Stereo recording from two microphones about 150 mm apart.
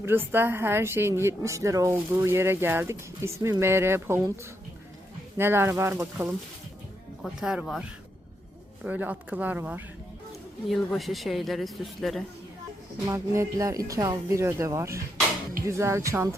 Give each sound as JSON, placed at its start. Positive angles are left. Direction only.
{"t": 0.0, "sound": "speech", "side_deg": -15}
{"t": 5.4, "sound": "speech", "side_deg": -15}
{"t": 7.2, "sound": "speech", "side_deg": -5}
{"t": 10.7, "sound": "speech", "side_deg": 0}
{"t": 13.1, "sound": "speech", "side_deg": -20}